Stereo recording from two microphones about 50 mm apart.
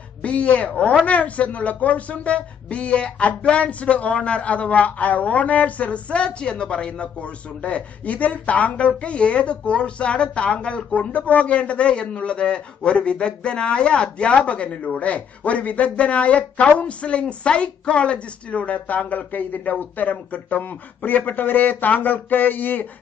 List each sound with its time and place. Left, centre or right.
0.2 s speech: left